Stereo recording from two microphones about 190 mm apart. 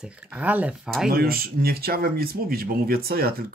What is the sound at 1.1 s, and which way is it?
Speech, 50° right (ahead or behind).